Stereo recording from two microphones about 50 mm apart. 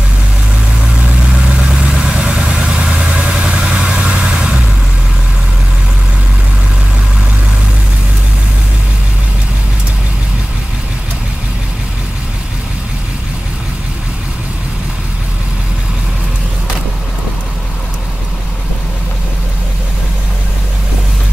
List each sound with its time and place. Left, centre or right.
1.0 s vehicle: centre
1.7 s vehicle: centre